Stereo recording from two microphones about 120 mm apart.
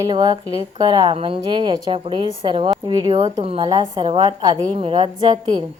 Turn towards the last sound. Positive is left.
turn(degrees=-40)  # may be behind; listen again after turning